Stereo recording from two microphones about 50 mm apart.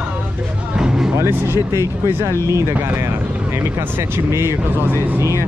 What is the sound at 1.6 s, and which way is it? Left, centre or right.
Speech, right.